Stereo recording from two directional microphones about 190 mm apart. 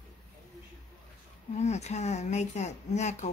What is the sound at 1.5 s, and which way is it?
Speech, 35° left (ahead or behind).